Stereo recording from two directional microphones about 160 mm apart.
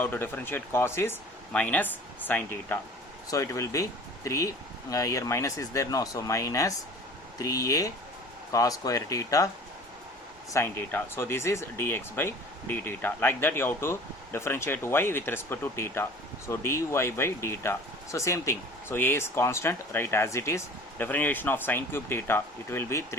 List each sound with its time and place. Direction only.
0.0 s speech: 10° left (ahead or behind)
10.5 s speech: 15° left (ahead or behind)